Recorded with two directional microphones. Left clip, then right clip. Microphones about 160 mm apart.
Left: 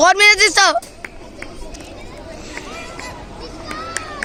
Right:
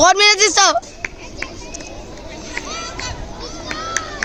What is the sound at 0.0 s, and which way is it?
Speech, 5° right (ahead or behind).